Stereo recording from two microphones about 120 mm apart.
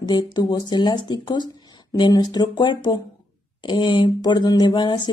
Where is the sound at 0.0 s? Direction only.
35° left (ahead or behind).